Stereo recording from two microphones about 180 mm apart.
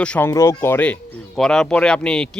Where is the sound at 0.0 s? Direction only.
10° left (ahead or behind).